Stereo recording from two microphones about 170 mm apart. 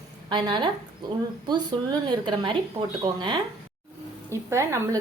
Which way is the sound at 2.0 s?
25° right (ahead or behind).